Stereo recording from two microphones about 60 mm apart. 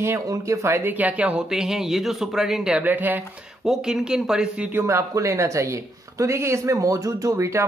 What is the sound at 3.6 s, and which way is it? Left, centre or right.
Speech, centre.